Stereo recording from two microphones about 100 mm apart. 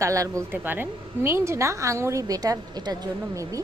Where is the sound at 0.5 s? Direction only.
20° right (ahead or behind).